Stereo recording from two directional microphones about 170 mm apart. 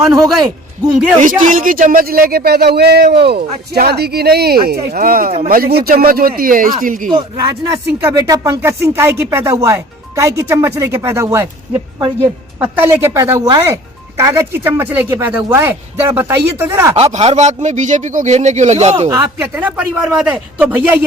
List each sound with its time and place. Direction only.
1.2 s a man's voice: 50° right (ahead or behind)
7.1 s speech: 20° right (ahead or behind)
12.5 s speech: 10° right (ahead or behind)
16.9 s speech: 40° right (ahead or behind)
19.0 s speech: 15° right (ahead or behind)